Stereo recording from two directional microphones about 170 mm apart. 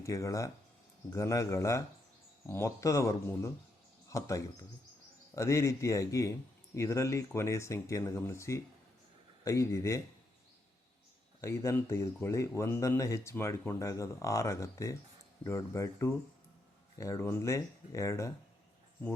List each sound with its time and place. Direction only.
0.0 s speech: 20° left (ahead or behind)
11.3 s speech: 15° left (ahead or behind)